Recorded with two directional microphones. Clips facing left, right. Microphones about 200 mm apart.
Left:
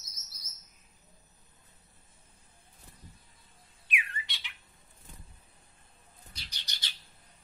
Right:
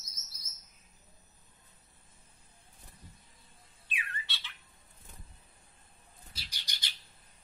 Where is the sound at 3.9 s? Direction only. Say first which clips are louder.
Left 3 dB; 15° left (ahead or behind).